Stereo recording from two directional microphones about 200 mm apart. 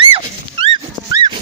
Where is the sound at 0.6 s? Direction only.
25° right (ahead or behind).